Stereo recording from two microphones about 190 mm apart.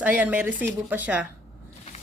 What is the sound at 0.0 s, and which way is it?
Speech, 10° right (ahead or behind).